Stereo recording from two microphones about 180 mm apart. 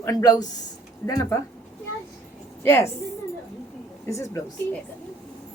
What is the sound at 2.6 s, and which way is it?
Speech, 15° left (ahead or behind).